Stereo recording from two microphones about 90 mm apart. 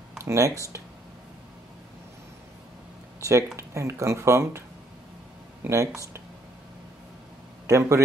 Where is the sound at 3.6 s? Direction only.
35° right (ahead or behind).